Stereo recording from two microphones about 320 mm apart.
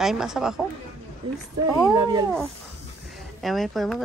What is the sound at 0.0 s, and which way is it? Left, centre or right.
Speech, centre.